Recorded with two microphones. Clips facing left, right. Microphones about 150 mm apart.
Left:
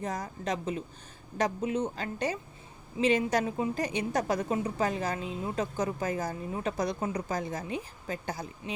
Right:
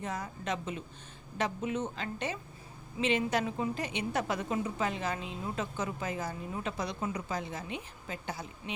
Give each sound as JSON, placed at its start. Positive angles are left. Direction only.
{"t": 0.0, "sound": "a woman's voice", "side_deg": 35}